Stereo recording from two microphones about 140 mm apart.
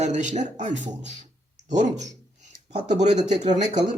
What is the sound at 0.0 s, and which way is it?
Speech, 60° right (ahead or behind).